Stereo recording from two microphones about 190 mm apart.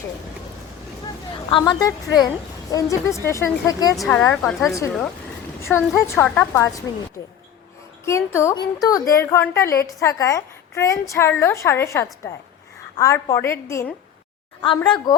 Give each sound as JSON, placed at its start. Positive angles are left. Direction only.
{"t": 1.5, "sound": "a woman's voice", "side_deg": 25}
{"t": 3.9, "sound": "a woman's voice", "side_deg": 5}
{"t": 5.7, "sound": "a woman's voice", "side_deg": 15}
{"t": 8.0, "sound": "a woman's voice", "side_deg": 15}
{"t": 14.8, "sound": "a woman's voice", "side_deg": 25}